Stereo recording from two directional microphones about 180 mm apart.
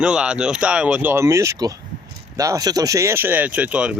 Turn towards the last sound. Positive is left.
turn(degrees=-5)  # may be behind; listen again after turning